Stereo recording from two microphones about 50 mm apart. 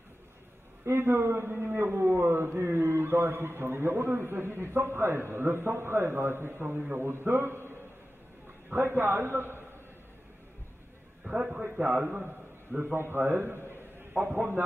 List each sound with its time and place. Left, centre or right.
0.8 s a man's voice: right
8.7 s a man's voice: right
11.2 s a man's voice: centre
12.9 s a man's voice: right
14.2 s a man's voice: right